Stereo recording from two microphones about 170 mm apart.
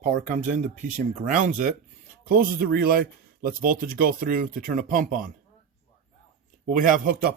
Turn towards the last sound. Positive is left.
turn(degrees=-55)  # may be behind; listen again after turning